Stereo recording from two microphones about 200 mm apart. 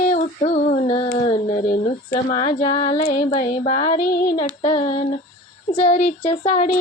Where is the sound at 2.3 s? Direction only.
30° left (ahead or behind).